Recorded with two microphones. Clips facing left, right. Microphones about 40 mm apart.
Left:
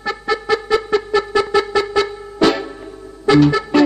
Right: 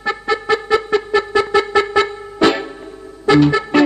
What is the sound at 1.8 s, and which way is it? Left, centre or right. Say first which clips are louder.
Music: right 2 dB; right.